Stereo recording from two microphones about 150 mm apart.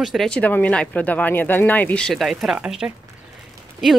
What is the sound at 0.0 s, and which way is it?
Speech, centre (ahead or behind).